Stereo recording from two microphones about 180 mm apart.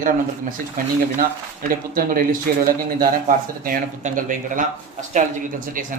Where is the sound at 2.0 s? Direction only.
50° right (ahead or behind).